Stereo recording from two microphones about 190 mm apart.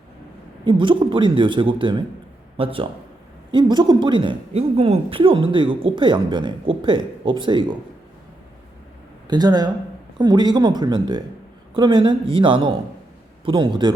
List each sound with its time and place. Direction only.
0.6 s speech: 25° right (ahead or behind)
9.2 s speech: 20° right (ahead or behind)